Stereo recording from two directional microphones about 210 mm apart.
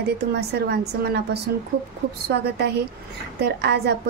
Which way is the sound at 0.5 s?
50° right (ahead or behind).